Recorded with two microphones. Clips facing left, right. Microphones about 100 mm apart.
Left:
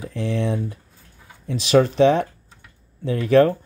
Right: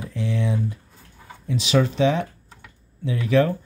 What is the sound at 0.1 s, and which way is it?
Speech, 40° left (ahead or behind).